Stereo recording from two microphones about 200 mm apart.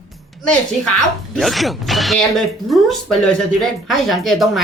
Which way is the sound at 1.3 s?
Centre (ahead or behind).